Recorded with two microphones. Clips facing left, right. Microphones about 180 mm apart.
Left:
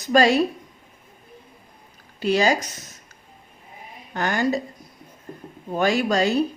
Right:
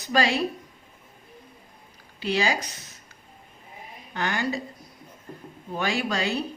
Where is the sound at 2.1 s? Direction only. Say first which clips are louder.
Left 6 dB; 45° left (ahead or behind).